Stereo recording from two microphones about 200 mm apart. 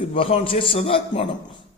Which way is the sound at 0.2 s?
30° left (ahead or behind).